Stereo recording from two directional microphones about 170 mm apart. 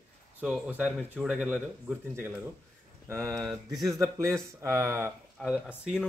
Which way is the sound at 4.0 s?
15° right (ahead or behind).